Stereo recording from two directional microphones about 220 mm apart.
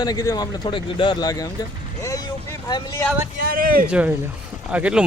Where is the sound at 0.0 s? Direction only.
15° left (ahead or behind).